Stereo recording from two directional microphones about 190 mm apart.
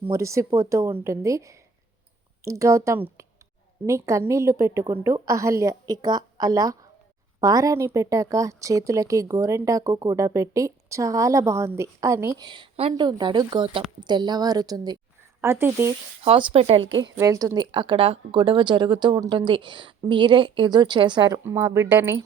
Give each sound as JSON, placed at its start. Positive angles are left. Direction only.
{"t": 0.0, "sound": "speech", "side_deg": -15}
{"t": 16.2, "sound": "speech", "side_deg": -30}
{"t": 17.2, "sound": "speech", "side_deg": -20}